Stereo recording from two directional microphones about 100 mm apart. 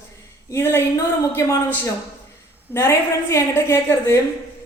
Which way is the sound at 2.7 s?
30° left (ahead or behind).